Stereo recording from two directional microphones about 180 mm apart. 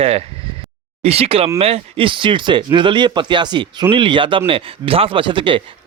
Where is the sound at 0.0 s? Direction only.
35° right (ahead or behind).